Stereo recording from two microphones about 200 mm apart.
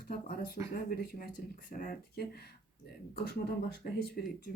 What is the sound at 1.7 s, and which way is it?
Speech, 40° left (ahead or behind).